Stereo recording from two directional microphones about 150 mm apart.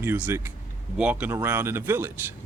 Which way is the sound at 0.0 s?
15° right (ahead or behind).